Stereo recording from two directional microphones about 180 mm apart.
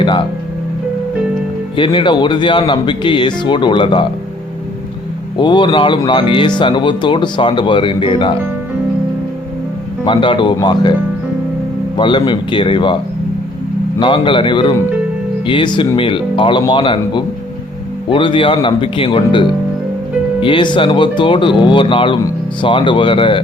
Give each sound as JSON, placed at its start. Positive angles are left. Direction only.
{"t": 0.0, "sound": "music", "side_deg": 25}
{"t": 1.7, "sound": "speech", "side_deg": 25}
{"t": 5.4, "sound": "speech", "side_deg": 25}
{"t": 10.1, "sound": "speech", "side_deg": 25}
{"t": 11.9, "sound": "speech", "side_deg": 25}
{"t": 14.0, "sound": "speech", "side_deg": 25}